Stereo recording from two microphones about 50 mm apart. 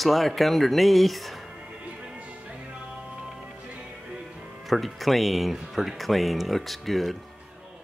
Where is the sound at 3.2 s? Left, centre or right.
Centre.